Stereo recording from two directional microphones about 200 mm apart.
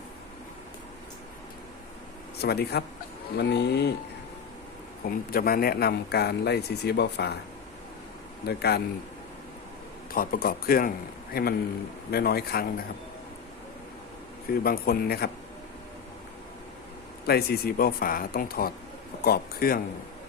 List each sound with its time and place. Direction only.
2.4 s speech: 55° left (ahead or behind)
5.0 s speech: 45° left (ahead or behind)
8.4 s speech: 55° left (ahead or behind)
10.1 s speech: 45° left (ahead or behind)
14.6 s speech: 50° left (ahead or behind)
17.2 s speech: 50° left (ahead or behind)